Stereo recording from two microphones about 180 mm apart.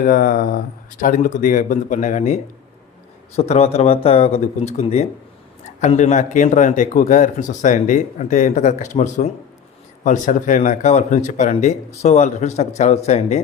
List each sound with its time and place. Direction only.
0.0 s speech: 50° left (ahead or behind)